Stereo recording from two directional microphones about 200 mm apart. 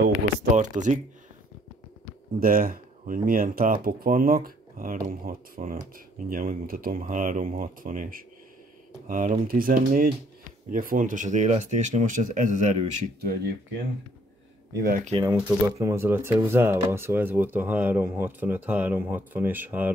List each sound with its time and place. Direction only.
0.6 s speech: 40° right (ahead or behind)
2.4 s speech: 45° right (ahead or behind)
14.7 s speech: 50° right (ahead or behind)
15.1 s speech: 20° right (ahead or behind)